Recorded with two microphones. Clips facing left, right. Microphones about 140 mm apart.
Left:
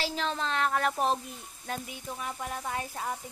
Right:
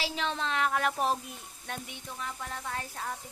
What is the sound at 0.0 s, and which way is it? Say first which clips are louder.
Speech: left 1 dB; centre (ahead or behind).